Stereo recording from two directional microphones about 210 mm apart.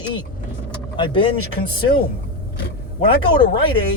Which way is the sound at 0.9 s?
20° left (ahead or behind).